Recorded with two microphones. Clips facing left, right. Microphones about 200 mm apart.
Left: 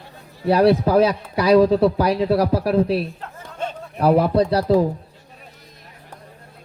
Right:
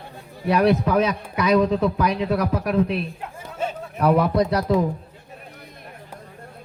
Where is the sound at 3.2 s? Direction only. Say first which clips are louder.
Right 1 dB; 5° right (ahead or behind).